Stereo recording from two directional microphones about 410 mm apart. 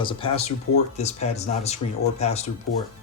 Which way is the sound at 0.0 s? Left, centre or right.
Centre.